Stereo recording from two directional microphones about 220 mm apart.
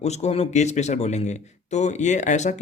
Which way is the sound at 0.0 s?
30° left (ahead or behind).